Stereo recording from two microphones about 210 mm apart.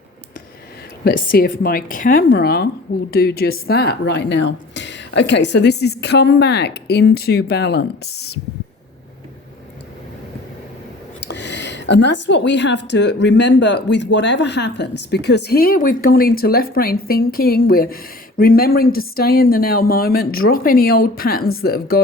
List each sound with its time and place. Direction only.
1.0 s speech: 45° left (ahead or behind)
11.2 s speech: 55° left (ahead or behind)